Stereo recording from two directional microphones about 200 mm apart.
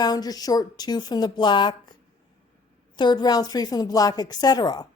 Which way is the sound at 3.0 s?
20° left (ahead or behind).